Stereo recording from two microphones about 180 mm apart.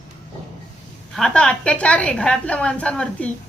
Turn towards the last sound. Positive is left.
turn(degrees=5)  # may be behind; listen again after turning